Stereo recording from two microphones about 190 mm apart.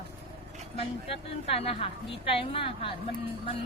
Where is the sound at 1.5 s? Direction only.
30° left (ahead or behind).